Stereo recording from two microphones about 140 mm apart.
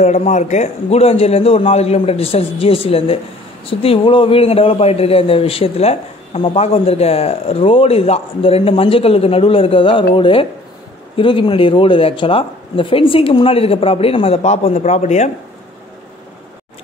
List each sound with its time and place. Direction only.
0.0 s a man's voice: 55° left (ahead or behind)